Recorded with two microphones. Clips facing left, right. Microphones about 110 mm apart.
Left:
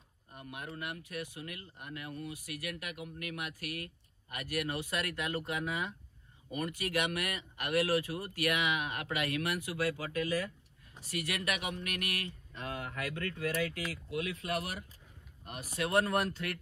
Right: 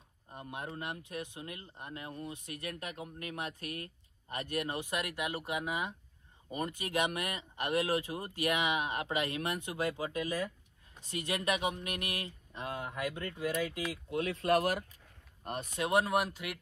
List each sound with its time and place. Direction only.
0.3 s speech: 25° right (ahead or behind)
14.1 s speech: 30° right (ahead or behind)
14.6 s speech: 60° right (ahead or behind)
15.4 s speech: 30° right (ahead or behind)
15.7 s speech: 20° right (ahead or behind)
16.1 s speech: 5° right (ahead or behind)